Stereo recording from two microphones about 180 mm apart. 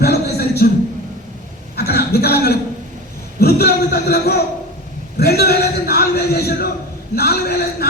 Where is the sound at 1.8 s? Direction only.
60° left (ahead or behind).